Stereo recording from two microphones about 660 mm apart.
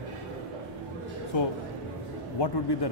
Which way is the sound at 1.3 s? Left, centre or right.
Left.